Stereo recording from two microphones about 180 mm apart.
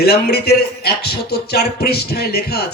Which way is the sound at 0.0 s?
60° left (ahead or behind).